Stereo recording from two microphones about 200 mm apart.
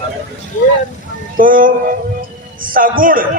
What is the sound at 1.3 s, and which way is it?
A man's voice, 45° right (ahead or behind).